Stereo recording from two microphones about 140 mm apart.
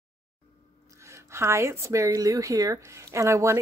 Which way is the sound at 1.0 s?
20° right (ahead or behind).